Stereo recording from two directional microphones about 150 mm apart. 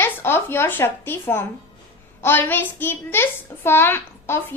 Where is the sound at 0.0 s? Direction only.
15° left (ahead or behind).